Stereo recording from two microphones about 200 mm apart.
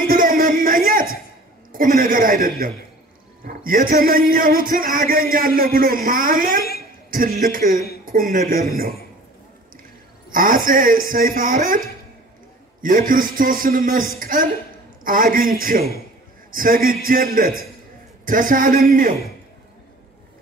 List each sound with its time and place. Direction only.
0.0 s music: 45° right (ahead or behind)
1.7 s a man's voice: 45° right (ahead or behind)
10.3 s a man's voice: 45° right (ahead or behind)
12.8 s a man's voice: 45° right (ahead or behind)